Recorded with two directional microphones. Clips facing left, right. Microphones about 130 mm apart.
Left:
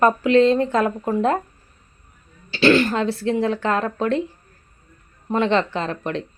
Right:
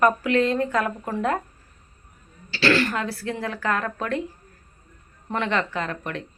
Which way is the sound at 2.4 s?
20° left (ahead or behind).